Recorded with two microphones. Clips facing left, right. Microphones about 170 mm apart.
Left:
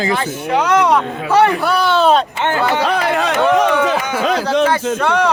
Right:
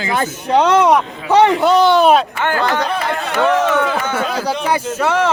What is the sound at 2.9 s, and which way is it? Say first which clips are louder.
Speech: left 4 dB; 90° left.